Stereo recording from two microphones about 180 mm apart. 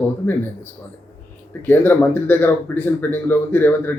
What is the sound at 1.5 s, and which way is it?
A man's voice, 10° left (ahead or behind).